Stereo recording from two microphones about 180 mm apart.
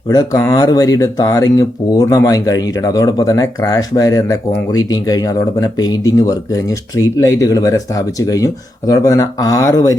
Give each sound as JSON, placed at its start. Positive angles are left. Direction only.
{"t": 0.1, "sound": "speech", "side_deg": 20}